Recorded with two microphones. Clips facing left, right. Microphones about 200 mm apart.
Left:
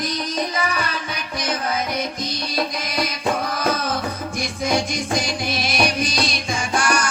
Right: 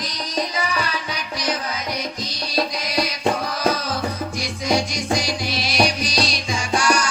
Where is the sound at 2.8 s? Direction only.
50° left (ahead or behind).